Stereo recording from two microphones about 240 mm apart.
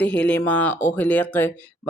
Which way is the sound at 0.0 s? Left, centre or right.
Centre.